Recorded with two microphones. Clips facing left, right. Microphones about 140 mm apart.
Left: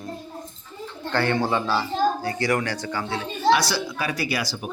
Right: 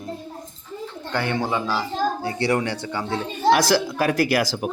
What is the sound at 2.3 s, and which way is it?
Speech, 30° right (ahead or behind).